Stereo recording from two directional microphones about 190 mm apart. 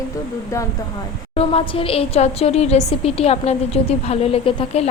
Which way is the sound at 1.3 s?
30° left (ahead or behind).